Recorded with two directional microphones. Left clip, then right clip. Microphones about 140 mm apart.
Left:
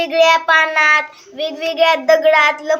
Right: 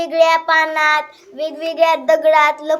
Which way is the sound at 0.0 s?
20° right (ahead or behind).